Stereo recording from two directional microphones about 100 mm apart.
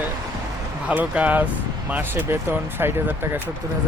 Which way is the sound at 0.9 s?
15° right (ahead or behind).